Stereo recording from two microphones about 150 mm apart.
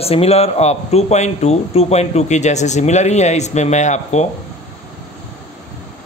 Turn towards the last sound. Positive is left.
turn(degrees=50)  # may be behind; listen again after turning